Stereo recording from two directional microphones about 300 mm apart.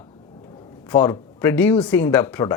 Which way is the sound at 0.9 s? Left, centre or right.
Centre.